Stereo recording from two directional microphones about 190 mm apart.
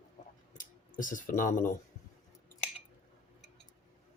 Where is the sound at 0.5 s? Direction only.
45° left (ahead or behind).